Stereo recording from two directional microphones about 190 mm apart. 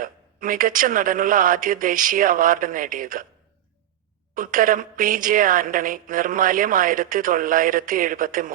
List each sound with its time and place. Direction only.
0.0 s a woman's voice: 45° right (ahead or behind)
4.4 s a woman's voice: 45° right (ahead or behind)